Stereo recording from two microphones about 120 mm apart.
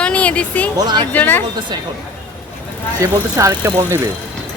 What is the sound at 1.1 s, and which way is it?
Speech, 15° left (ahead or behind).